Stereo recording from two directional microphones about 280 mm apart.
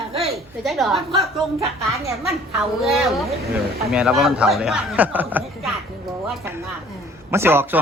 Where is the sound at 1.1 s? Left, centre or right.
Centre.